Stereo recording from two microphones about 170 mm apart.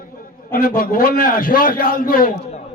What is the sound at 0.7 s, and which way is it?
A man's voice, 55° left (ahead or behind).